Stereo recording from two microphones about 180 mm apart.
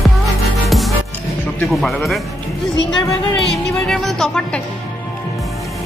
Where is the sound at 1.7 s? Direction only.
Centre (ahead or behind).